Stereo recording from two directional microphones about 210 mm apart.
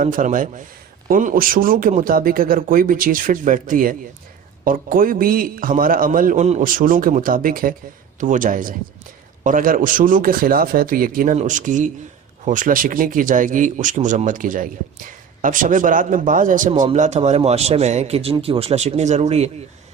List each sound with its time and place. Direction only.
0.0 s a man's voice: 40° right (ahead or behind)